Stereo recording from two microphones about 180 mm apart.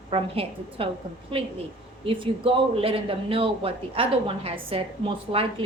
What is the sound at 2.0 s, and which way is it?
Speech, 30° right (ahead or behind).